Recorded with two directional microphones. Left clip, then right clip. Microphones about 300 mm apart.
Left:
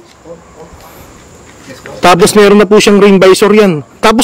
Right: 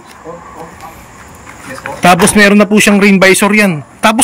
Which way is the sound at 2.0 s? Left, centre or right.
Centre.